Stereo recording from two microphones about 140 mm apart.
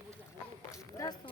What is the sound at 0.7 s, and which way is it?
Run, 25° left (ahead or behind).